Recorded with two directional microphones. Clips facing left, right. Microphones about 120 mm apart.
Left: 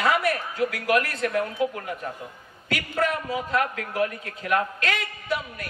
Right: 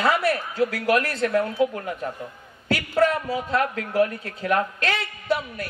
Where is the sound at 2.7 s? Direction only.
30° right (ahead or behind).